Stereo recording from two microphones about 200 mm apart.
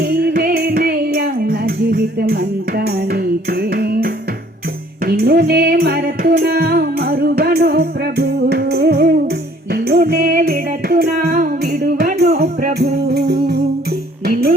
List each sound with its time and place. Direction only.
0.0 s music: 50° right (ahead or behind)